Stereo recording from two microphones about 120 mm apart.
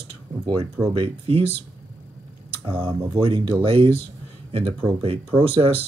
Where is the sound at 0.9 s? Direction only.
50° right (ahead or behind).